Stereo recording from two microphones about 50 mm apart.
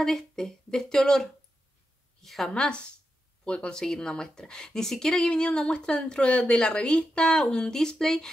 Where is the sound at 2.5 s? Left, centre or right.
Centre.